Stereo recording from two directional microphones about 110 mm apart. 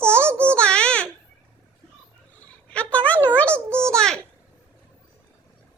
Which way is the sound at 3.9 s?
5° left (ahead or behind).